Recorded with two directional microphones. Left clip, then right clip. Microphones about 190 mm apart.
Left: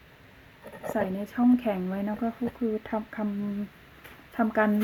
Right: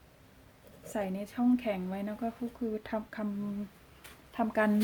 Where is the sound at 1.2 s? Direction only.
20° left (ahead or behind).